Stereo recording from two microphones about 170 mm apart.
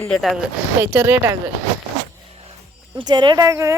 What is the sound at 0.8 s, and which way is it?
Speech, 15° right (ahead or behind).